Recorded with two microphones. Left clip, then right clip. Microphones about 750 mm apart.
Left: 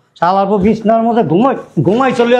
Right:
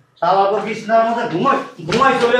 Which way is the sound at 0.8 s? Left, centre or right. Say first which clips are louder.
Left 2 dB; left.